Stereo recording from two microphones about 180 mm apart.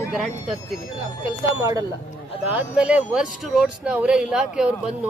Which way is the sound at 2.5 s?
5° right (ahead or behind).